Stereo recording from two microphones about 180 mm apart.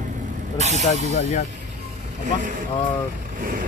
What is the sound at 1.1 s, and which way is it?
Speech, 40° left (ahead or behind).